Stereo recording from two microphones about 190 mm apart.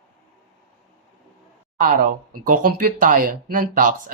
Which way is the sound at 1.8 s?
45° right (ahead or behind).